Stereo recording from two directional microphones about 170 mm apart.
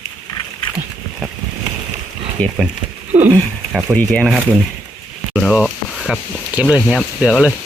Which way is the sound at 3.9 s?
5° left (ahead or behind).